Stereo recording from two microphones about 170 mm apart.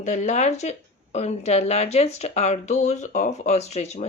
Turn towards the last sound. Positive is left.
turn(degrees=40)  # may be behind; listen again after turning